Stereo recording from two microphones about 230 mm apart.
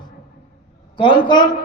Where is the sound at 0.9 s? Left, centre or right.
Left.